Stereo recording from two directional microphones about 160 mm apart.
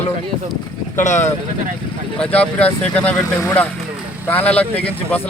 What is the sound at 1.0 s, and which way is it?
Speech, 50° left (ahead or behind).